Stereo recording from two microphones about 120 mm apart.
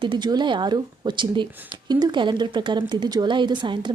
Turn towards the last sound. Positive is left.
turn(degrees=-40)  # may be behind; listen again after turning